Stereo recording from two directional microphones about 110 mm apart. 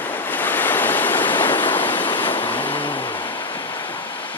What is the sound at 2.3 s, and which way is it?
Vehicle, 55° left (ahead or behind).